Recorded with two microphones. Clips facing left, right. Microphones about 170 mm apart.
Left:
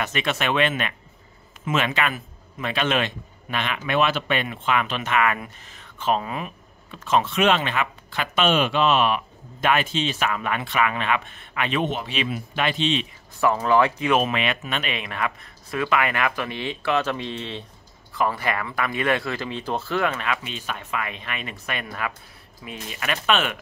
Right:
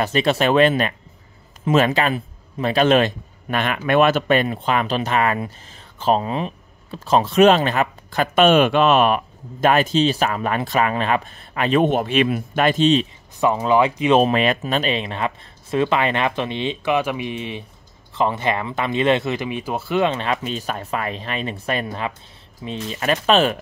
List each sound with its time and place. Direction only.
0.0 s a man's voice: 35° right (ahead or behind)
13.4 s speech: 20° right (ahead or behind)
14.1 s a man's voice: 35° right (ahead or behind)